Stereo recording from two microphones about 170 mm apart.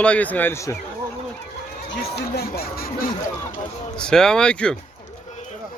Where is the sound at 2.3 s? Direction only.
65° left (ahead or behind).